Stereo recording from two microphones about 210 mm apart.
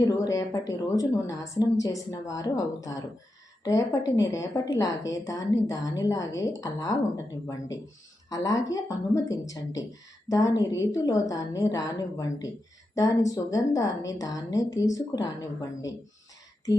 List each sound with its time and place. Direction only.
0.0 s a woman's voice: 15° left (ahead or behind)
8.3 s a woman's voice: 15° left (ahead or behind)